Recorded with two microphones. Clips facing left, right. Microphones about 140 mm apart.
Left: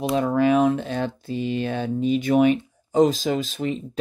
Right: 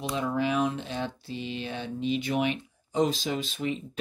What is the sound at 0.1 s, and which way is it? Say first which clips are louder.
Speech: left 9 dB; 50° left (ahead or behind).